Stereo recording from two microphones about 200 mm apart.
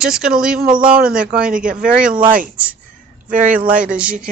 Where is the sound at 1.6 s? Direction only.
40° right (ahead or behind).